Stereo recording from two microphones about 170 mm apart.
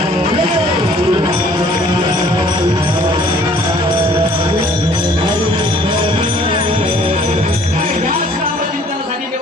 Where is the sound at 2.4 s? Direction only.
25° right (ahead or behind).